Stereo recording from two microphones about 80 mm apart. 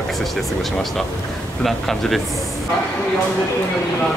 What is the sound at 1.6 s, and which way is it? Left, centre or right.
Speech, centre.